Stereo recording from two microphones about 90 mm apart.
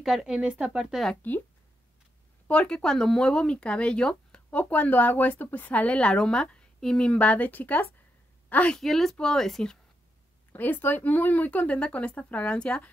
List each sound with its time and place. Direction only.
0.0 s speech: 5° right (ahead or behind)
1.2 s speech: 20° left (ahead or behind)
2.4 s speech: 15° left (ahead or behind)
8.8 s speech: 5° left (ahead or behind)
10.5 s speech: 20° left (ahead or behind)